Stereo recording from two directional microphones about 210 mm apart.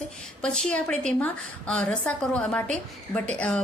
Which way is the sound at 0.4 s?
5° left (ahead or behind).